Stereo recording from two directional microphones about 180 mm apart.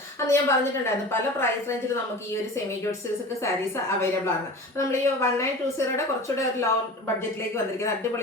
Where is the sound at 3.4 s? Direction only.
15° left (ahead or behind).